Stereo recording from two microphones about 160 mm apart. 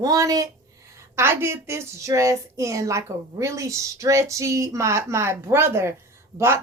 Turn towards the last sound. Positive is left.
turn(degrees=-15)  # may be behind; listen again after turning